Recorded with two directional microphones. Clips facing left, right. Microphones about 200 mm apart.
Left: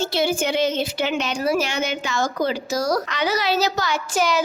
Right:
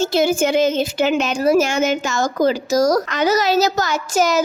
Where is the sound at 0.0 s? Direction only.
45° right (ahead or behind).